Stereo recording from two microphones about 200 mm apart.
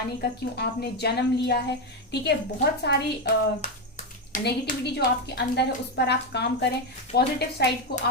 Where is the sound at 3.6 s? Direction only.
40° left (ahead or behind).